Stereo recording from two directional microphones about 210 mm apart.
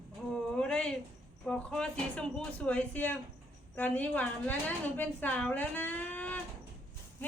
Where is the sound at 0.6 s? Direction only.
5° left (ahead or behind).